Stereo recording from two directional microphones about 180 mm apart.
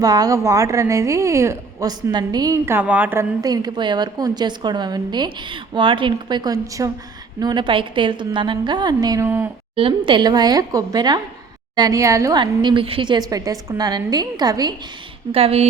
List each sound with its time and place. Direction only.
0.0 s a woman's voice: 20° right (ahead or behind)
9.7 s a woman's voice: 30° right (ahead or behind)
15.3 s a woman's voice: 35° right (ahead or behind)